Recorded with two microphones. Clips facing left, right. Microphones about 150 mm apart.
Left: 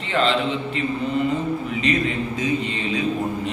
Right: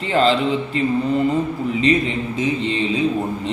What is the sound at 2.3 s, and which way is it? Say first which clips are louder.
Speech: right 3 dB; 25° right (ahead or behind).